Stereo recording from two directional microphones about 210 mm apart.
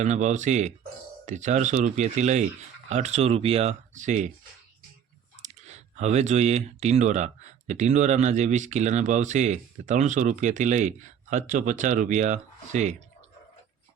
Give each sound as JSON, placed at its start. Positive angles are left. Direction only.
{"t": 0.0, "sound": "speech", "side_deg": -35}
{"t": 5.4, "sound": "speech", "side_deg": -30}